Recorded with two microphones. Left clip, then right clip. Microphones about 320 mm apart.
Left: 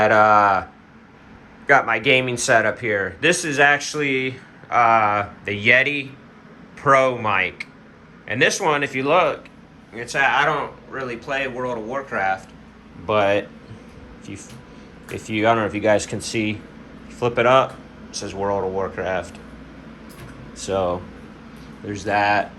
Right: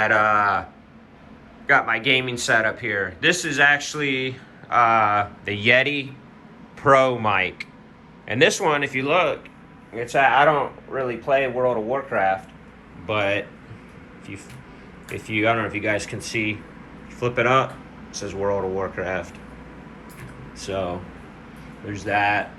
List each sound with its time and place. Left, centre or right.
0.0 s speech: centre
1.6 s speech: centre
15.1 s speech: left
15.4 s speech: centre
20.6 s speech: centre